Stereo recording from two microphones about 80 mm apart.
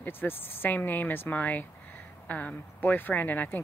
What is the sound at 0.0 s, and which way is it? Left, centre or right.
Speech, left.